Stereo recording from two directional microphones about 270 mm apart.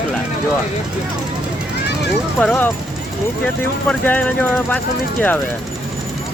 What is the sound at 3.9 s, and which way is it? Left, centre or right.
Speech, centre.